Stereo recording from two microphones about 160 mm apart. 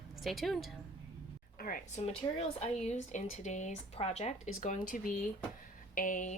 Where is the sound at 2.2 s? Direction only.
25° left (ahead or behind).